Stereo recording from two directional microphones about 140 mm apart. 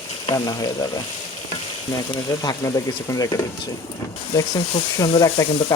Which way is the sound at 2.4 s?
30° left (ahead or behind).